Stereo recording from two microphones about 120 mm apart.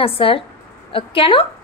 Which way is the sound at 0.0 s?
50° left (ahead or behind).